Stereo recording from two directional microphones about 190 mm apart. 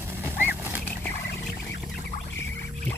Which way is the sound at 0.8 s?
5° left (ahead or behind).